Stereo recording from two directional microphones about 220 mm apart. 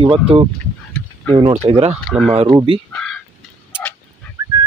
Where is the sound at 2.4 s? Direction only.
20° right (ahead or behind).